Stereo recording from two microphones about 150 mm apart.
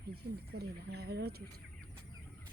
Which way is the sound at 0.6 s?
90° right.